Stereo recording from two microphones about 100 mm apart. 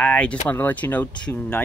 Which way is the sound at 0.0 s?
15° left (ahead or behind).